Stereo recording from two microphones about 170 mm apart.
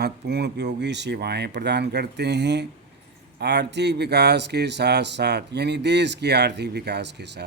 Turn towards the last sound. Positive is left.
turn(degrees=-85)